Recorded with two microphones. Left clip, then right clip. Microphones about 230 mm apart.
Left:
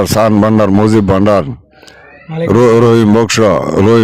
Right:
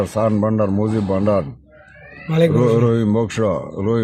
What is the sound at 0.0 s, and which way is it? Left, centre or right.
Speech, left.